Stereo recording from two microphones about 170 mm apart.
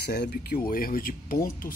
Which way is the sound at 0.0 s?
75° left (ahead or behind).